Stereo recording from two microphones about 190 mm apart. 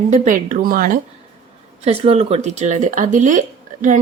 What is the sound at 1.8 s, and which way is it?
A woman's voice, 30° right (ahead or behind).